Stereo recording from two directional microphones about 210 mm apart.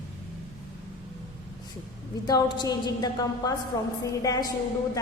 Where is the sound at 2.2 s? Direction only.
20° left (ahead or behind).